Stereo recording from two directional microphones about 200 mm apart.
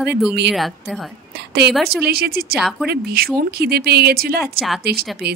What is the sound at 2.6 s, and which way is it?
Speech, centre (ahead or behind).